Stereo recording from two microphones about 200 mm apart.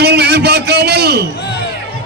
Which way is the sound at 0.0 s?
55° right (ahead or behind).